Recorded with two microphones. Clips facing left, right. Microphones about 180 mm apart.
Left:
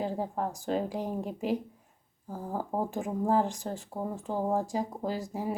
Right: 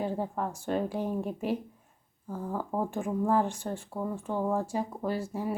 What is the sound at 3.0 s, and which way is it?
Speech, 15° left (ahead or behind).